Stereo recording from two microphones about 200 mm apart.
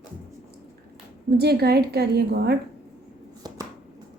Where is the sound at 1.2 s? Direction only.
50° right (ahead or behind).